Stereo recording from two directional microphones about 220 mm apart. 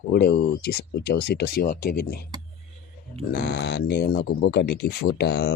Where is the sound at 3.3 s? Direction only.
45° left (ahead or behind).